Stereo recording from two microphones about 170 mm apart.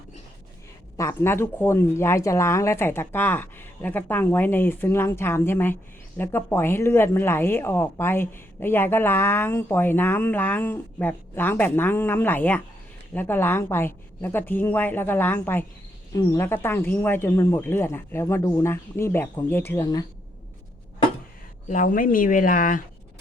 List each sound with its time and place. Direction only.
0.9 s a woman's voice: 15° left (ahead or behind)
21.7 s a woman's voice: 50° left (ahead or behind)